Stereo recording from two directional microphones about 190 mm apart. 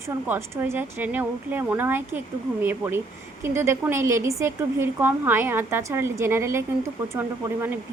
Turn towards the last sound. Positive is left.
turn(degrees=-10)  # may be behind; listen again after turning